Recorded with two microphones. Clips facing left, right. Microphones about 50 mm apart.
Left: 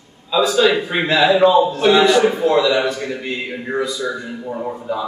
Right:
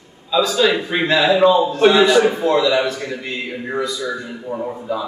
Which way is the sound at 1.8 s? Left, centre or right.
Centre.